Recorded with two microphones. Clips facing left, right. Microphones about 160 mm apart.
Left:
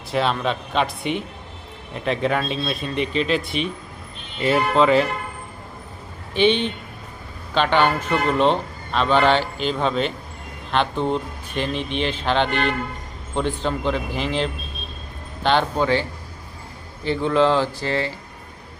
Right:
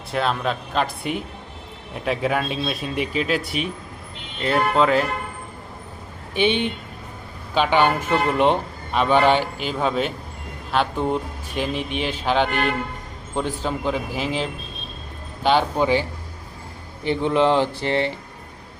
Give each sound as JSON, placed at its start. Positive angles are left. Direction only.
{"t": 0.1, "sound": "speech", "side_deg": 0}
{"t": 7.5, "sound": "speech", "side_deg": -10}